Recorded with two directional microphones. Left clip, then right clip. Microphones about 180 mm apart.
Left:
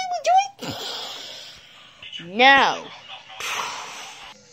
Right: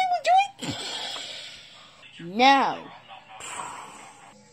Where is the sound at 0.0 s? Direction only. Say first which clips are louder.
Left 1 dB; 10° left (ahead or behind).